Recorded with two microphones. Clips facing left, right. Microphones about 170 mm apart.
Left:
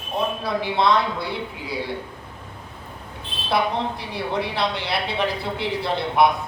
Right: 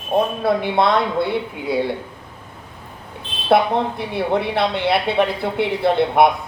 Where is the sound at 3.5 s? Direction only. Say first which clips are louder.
Right 6 dB; 55° right (ahead or behind).